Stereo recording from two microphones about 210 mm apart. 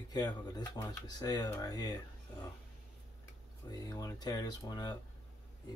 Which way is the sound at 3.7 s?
20° left (ahead or behind).